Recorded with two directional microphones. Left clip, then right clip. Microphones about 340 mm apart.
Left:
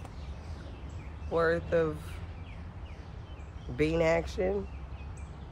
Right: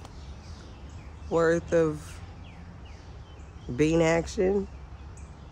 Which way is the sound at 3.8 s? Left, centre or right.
Right.